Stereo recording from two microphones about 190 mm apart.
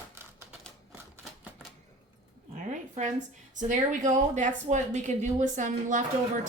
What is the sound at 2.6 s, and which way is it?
A woman's voice, 40° right (ahead or behind).